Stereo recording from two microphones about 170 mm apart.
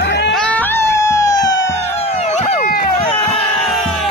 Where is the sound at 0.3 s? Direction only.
10° left (ahead or behind).